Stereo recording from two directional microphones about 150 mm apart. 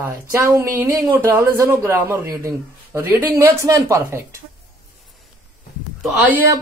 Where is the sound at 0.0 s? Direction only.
15° right (ahead or behind).